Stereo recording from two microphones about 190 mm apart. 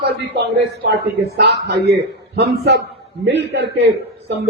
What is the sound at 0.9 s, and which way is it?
A man's voice, 60° right (ahead or behind).